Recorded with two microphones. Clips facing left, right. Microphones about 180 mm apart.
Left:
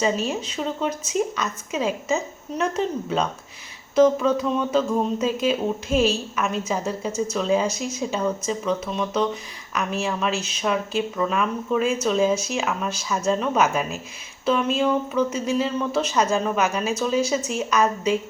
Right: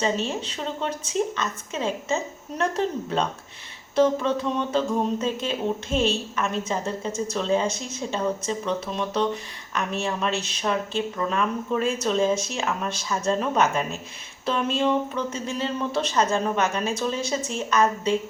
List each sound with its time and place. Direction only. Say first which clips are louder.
0.0 s a woman's voice: left 2 dB; 5° left (ahead or behind)
4.0 s a woman's voice: left 4 dB; 5° left (ahead or behind)